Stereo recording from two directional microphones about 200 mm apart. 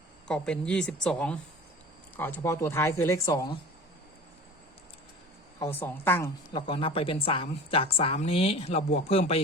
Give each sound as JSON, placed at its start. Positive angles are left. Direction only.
{"t": 0.3, "sound": "speech", "side_deg": 5}
{"t": 5.5, "sound": "speech", "side_deg": 10}
{"t": 6.5, "sound": "speech", "side_deg": 25}